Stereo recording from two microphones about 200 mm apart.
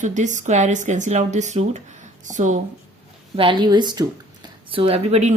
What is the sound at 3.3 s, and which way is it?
A woman's voice, 25° right (ahead or behind).